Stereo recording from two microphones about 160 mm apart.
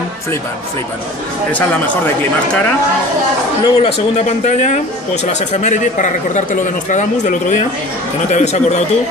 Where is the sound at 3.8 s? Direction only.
45° left (ahead or behind).